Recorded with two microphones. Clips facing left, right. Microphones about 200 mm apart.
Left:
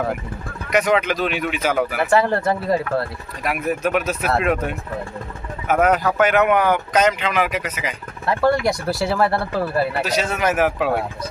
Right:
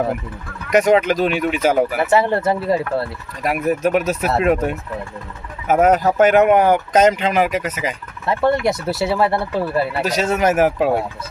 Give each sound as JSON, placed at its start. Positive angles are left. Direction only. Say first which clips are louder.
{"t": 0.7, "sound": "speech", "louder": "right 4 dB", "side_deg": -45}
{"t": 2.0, "sound": "speech", "louder": "right 1 dB", "side_deg": -25}
{"t": 3.4, "sound": "speech", "louder": "right 4 dB", "side_deg": -40}
{"t": 8.3, "sound": "speech", "louder": "right 1 dB", "side_deg": -20}
{"t": 10.0, "sound": "speech", "louder": "right 4 dB", "side_deg": -45}